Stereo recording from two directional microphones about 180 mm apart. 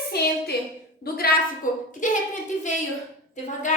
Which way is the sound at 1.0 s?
55° left (ahead or behind).